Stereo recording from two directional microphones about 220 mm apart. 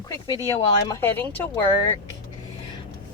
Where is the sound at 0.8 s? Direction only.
10° left (ahead or behind).